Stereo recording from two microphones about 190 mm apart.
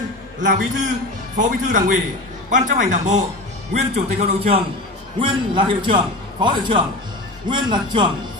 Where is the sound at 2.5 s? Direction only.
40° right (ahead or behind).